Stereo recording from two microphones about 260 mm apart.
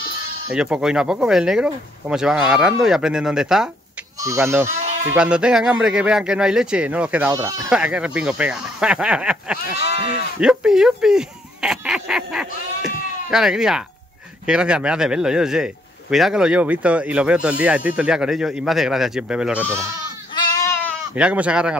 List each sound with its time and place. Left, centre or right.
0.5 s a man's voice: centre
20.3 s goat: centre
21.1 s a man's voice: centre